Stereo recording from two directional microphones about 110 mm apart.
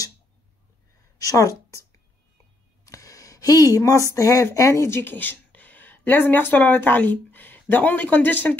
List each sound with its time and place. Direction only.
1.2 s a woman's voice: 30° left (ahead or behind)
2.8 s a sound: 30° left (ahead or behind)
4.1 s speech: 30° left (ahead or behind)